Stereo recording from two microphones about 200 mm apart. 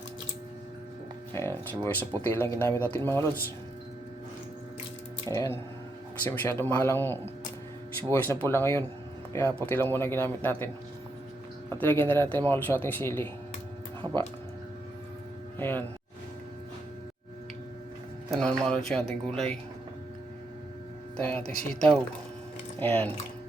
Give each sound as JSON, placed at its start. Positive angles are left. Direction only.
{"t": 1.3, "sound": "speech", "side_deg": 15}
{"t": 5.3, "sound": "speech", "side_deg": 15}
{"t": 11.7, "sound": "speech", "side_deg": 10}
{"t": 14.0, "sound": "speech", "side_deg": -20}
{"t": 15.5, "sound": "speech", "side_deg": 10}
{"t": 18.3, "sound": "speech", "side_deg": 5}
{"t": 21.2, "sound": "speech", "side_deg": 10}
{"t": 22.8, "sound": "speech", "side_deg": 10}